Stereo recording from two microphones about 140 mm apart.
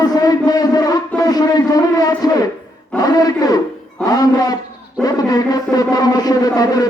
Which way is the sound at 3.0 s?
25° left (ahead or behind).